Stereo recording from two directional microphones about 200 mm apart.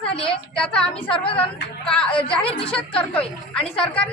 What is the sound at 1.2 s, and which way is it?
Speech, 25° left (ahead or behind).